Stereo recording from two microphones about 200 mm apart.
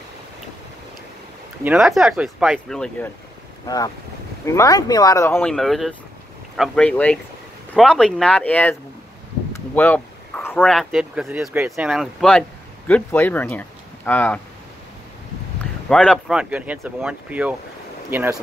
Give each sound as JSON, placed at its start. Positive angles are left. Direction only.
{"t": 1.6, "sound": "speech", "side_deg": -5}
{"t": 3.6, "sound": "speech", "side_deg": 20}
{"t": 9.8, "sound": "speech", "side_deg": 10}
{"t": 15.9, "sound": "speech", "side_deg": 5}
{"t": 16.3, "sound": "speech", "side_deg": -5}